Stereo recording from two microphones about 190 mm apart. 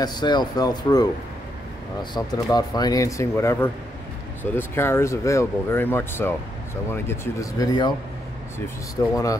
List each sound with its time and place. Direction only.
0.0 s speech: 20° left (ahead or behind)
2.1 s speech: 20° left (ahead or behind)
9.1 s speech: 15° left (ahead or behind)